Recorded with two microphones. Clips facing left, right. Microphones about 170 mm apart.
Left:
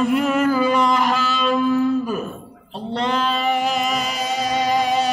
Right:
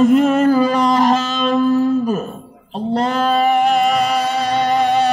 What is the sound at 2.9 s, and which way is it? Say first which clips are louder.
Music: right 5 dB; 45° right (ahead or behind).